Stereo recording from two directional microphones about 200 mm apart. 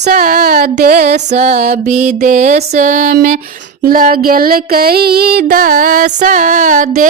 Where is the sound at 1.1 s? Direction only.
35° right (ahead or behind).